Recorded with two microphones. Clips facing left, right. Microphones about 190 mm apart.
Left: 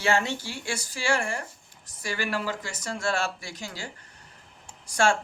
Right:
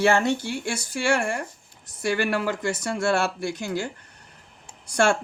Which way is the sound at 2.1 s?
55° right (ahead or behind).